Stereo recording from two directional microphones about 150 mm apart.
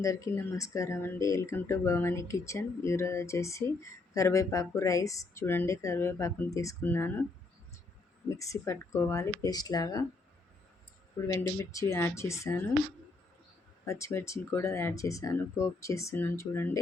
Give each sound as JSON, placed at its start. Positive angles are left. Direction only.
{"t": 0.0, "sound": "speech", "side_deg": 20}
{"t": 8.3, "sound": "speech", "side_deg": 20}
{"t": 11.3, "sound": "speech", "side_deg": 20}
{"t": 13.8, "sound": "speech", "side_deg": 20}